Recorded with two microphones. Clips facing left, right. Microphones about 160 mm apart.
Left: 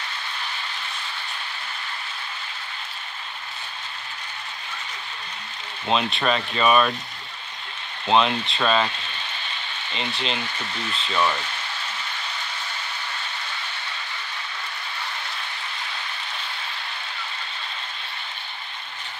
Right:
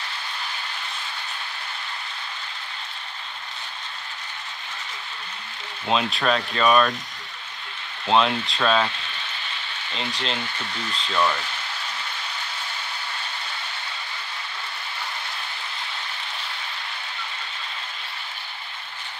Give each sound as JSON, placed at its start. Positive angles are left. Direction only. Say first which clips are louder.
{"t": 5.9, "sound": "speech", "louder": "even", "side_deg": 0}
{"t": 8.1, "sound": "speech", "louder": "even", "side_deg": 0}
{"t": 9.9, "sound": "speech", "louder": "left 1 dB", "side_deg": 0}